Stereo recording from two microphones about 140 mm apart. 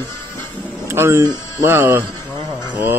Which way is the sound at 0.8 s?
20° right (ahead or behind).